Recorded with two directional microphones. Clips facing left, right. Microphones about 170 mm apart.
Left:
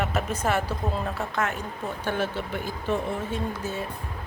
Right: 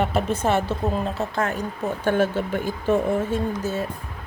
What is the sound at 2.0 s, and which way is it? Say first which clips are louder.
Speech: right 8 dB; 45° right (ahead or behind).